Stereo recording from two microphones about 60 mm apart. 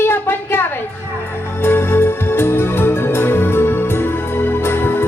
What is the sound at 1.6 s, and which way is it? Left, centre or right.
Music, left.